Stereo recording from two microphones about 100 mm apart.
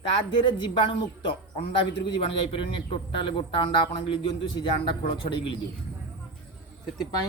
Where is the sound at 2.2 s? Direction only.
60° left (ahead or behind).